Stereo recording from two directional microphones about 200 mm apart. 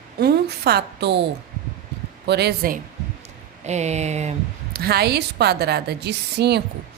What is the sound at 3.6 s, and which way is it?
Speech, 35° right (ahead or behind).